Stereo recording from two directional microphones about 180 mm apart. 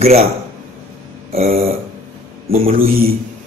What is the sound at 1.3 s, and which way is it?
Speech, 35° right (ahead or behind).